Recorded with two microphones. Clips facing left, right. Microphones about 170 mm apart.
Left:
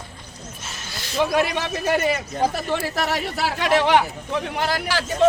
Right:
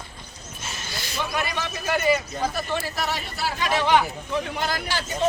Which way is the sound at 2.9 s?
80° left.